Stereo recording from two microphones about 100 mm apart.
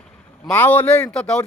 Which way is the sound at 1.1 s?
10° left (ahead or behind).